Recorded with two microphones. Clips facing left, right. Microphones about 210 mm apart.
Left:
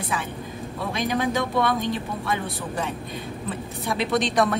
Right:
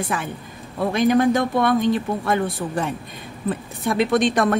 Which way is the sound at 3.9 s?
50° right (ahead or behind).